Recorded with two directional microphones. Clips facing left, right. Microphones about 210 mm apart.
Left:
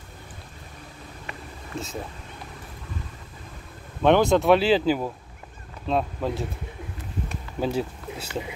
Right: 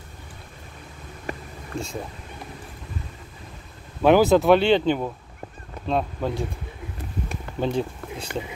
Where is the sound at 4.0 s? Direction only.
5° right (ahead or behind).